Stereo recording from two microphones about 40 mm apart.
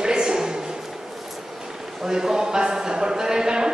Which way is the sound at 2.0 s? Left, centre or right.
Centre.